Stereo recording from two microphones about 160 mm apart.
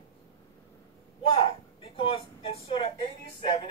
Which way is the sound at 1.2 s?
35° left (ahead or behind).